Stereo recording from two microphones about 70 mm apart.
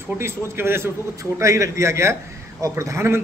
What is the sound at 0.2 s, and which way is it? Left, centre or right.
Speech, right.